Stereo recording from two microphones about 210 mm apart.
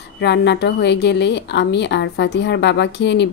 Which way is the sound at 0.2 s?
55° left (ahead or behind).